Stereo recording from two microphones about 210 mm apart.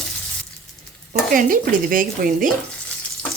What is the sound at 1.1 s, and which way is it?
Stir, 40° right (ahead or behind).